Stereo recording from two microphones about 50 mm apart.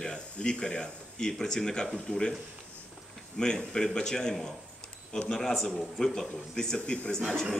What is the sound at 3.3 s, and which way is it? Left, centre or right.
Speech, centre.